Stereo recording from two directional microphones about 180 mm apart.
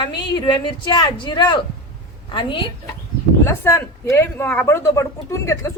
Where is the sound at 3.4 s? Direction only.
15° left (ahead or behind).